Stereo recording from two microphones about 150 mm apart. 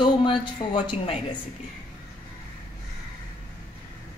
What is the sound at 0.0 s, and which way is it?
Speech, 35° left (ahead or behind).